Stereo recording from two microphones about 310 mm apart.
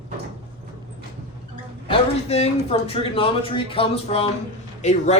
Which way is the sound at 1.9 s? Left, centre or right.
Centre.